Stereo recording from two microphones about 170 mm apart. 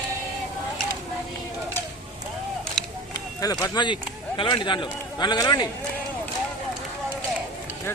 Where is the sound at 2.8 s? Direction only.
5° left (ahead or behind).